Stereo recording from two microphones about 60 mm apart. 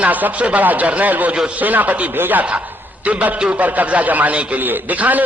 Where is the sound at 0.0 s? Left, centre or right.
Right.